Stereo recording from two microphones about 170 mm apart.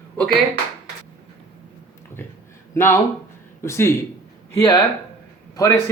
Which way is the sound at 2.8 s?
15° left (ahead or behind).